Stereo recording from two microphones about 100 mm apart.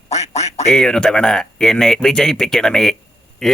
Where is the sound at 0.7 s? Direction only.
5° left (ahead or behind).